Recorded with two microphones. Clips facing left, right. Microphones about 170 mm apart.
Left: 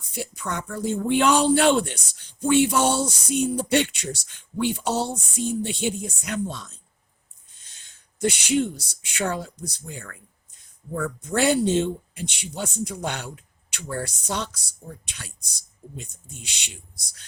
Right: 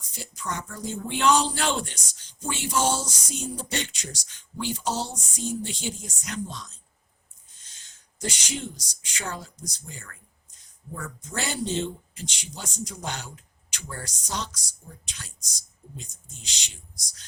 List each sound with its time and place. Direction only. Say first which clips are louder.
0.1 s speech: left 4 dB; 60° left (ahead or behind)
8.2 s speech: left 11 dB; 60° left (ahead or behind)
16.0 s speech: left 4 dB; 60° left (ahead or behind)